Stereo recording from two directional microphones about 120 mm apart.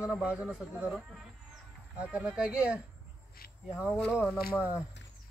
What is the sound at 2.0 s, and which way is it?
Speech, 10° right (ahead or behind).